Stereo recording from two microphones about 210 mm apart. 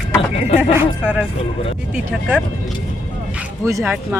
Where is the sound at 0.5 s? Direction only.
10° right (ahead or behind).